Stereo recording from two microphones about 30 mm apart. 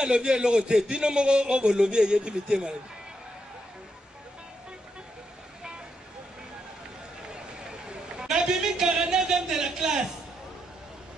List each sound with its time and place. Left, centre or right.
0.0 s a man's voice: right
7.7 s a sound: right
9.2 s speech: centre